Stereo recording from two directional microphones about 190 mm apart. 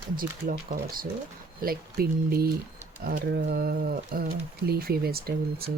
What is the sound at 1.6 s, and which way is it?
Speech, 50° right (ahead or behind).